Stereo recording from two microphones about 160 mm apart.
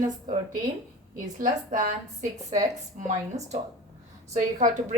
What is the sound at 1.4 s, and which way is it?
Speech, 50° right (ahead or behind).